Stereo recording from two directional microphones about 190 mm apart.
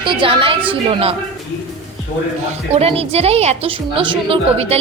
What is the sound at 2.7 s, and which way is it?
A woman's voice, 30° right (ahead or behind).